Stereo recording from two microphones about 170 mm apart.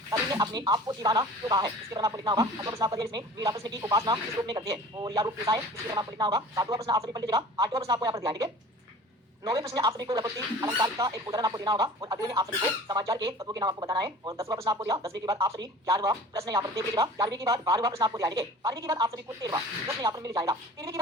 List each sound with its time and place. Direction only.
0.1 s speech: 20° right (ahead or behind)